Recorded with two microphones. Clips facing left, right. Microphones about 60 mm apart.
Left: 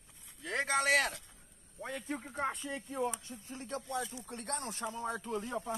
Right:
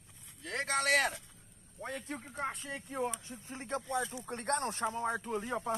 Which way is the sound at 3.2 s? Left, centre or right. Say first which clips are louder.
Right 1 dB; right.